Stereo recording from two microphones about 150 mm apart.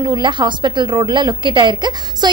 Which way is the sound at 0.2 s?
30° right (ahead or behind).